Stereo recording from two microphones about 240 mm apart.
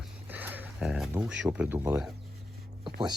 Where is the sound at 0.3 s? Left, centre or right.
Centre.